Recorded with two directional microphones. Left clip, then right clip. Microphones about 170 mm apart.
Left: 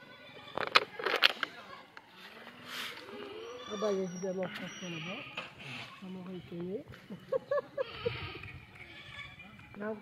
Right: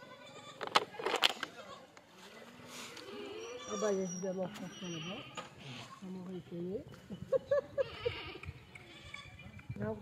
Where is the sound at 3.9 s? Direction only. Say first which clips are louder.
Left 2 dB; centre (ahead or behind).